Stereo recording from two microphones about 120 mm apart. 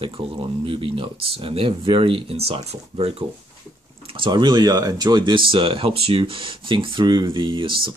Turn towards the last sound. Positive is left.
turn(degrees=-45)  # may be behind; listen again after turning